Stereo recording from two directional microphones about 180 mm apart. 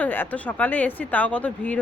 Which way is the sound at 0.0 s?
10° left (ahead or behind).